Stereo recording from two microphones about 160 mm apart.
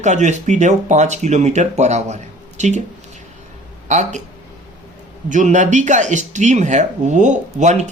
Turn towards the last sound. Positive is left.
turn(degrees=-50)  # may be behind; listen again after turning